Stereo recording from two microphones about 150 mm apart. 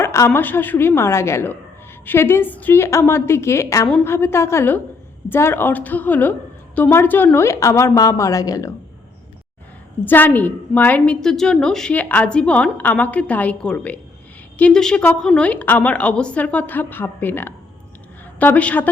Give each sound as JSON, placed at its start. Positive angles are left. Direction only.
{"t": 0.0, "sound": "a sound", "side_deg": 20}
{"t": 0.3, "sound": "a woman's voice", "side_deg": 15}
{"t": 10.0, "sound": "a woman's voice", "side_deg": 10}